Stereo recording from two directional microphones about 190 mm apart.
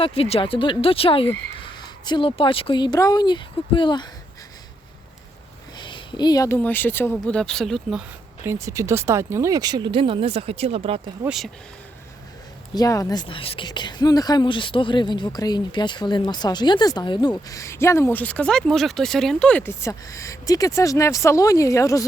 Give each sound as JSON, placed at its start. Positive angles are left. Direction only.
{"t": 0.0, "sound": "speech", "side_deg": 30}
{"t": 5.7, "sound": "speech", "side_deg": 25}
{"t": 8.4, "sound": "speech", "side_deg": -15}
{"t": 11.3, "sound": "speech", "side_deg": 0}
{"t": 12.7, "sound": "speech", "side_deg": 20}